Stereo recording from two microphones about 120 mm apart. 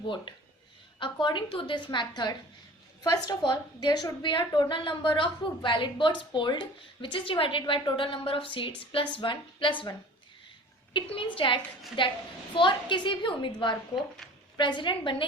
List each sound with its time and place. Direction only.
0.0 s a woman's voice: 40° left (ahead or behind)
10.9 s a woman's voice: 45° left (ahead or behind)